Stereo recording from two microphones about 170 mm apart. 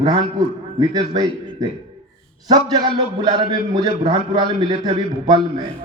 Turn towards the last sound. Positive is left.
turn(degrees=-25)  # may be behind; listen again after turning